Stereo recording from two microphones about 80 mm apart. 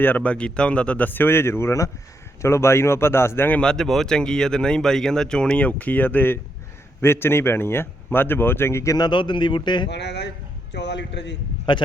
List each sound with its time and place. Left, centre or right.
0.0 s a man's voice: left
3.6 s speech: centre; by 9.0 s left
9.0 s speech: left
11.7 s a man's voice: left